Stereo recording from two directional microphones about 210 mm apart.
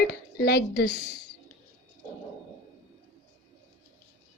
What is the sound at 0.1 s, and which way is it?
Speech, 50° left (ahead or behind).